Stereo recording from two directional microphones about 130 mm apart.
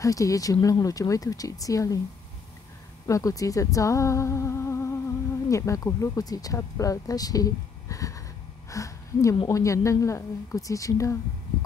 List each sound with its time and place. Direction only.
0.0 s speech: 25° left (ahead or behind)
3.1 s speech: 25° left (ahead or behind)